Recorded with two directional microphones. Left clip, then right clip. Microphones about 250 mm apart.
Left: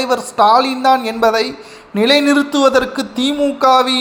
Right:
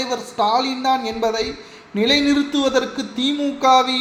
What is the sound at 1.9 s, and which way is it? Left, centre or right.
Speech, centre.